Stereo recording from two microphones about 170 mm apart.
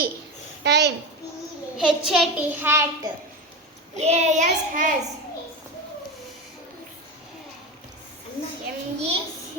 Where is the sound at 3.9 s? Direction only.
40° right (ahead or behind).